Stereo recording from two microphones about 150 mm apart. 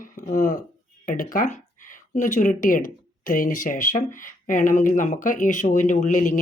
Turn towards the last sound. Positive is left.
turn(degrees=60)  # may be behind; listen again after turning